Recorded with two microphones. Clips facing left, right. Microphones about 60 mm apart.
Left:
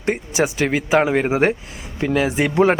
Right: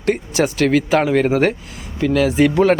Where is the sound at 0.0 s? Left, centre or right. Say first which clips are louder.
Right 2 dB; centre.